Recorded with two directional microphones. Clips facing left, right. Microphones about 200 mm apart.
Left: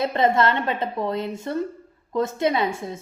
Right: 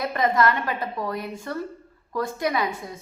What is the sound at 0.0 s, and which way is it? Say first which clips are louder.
A woman's voice: left 2 dB; 25° left (ahead or behind).